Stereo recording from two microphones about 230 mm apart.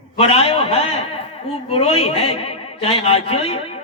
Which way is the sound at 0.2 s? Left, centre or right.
Left.